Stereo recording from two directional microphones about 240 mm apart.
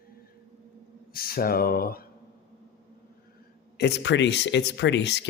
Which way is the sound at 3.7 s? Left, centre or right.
Left.